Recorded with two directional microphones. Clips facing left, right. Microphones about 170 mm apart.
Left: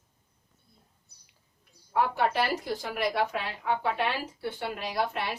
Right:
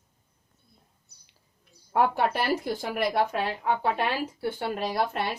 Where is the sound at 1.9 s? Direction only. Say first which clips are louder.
Right 3 dB; 55° right (ahead or behind).